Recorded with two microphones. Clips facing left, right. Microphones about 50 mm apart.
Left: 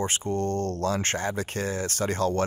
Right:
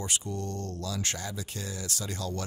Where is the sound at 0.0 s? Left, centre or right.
Left.